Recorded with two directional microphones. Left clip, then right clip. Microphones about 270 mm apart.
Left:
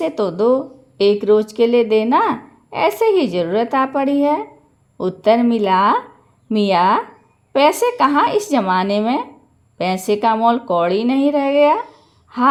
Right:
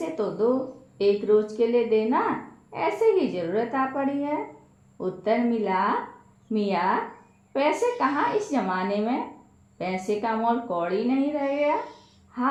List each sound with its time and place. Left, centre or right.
0.0 s a woman's voice: left